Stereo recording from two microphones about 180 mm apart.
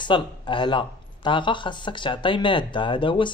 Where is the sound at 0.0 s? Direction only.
25° left (ahead or behind).